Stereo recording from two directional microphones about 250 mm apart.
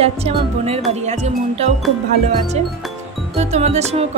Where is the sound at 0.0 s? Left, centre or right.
Right.